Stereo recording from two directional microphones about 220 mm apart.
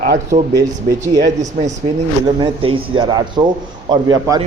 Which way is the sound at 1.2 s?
30° right (ahead or behind).